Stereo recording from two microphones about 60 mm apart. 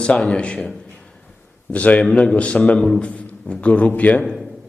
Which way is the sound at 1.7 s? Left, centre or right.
Left.